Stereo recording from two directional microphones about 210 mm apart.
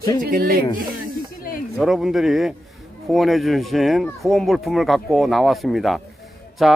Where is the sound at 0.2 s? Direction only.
45° right (ahead or behind).